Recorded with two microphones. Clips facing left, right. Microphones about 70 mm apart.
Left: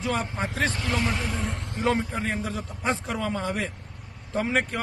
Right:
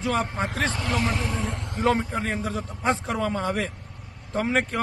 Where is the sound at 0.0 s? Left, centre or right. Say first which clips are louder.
Right 3 dB; right.